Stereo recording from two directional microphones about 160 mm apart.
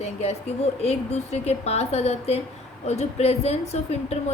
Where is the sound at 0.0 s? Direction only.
40° left (ahead or behind).